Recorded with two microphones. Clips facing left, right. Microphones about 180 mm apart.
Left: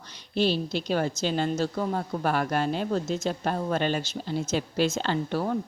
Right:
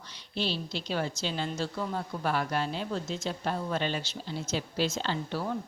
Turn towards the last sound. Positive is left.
turn(degrees=55)  # may be behind; listen again after turning